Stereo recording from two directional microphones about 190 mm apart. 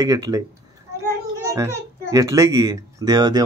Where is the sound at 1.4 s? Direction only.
15° right (ahead or behind).